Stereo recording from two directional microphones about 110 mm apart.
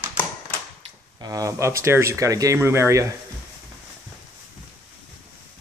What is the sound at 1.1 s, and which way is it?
A man's voice, 35° right (ahead or behind).